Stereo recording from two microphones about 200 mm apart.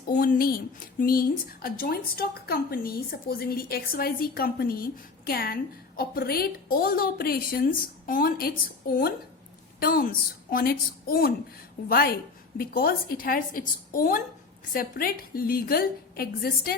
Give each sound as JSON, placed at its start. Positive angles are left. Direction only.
{"t": 0.1, "sound": "a woman's voice", "side_deg": 45}